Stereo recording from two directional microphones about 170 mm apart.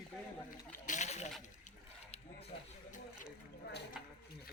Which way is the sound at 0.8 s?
45° left (ahead or behind).